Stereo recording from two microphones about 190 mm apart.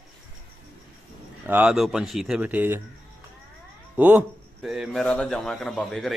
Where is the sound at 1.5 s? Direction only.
5° right (ahead or behind).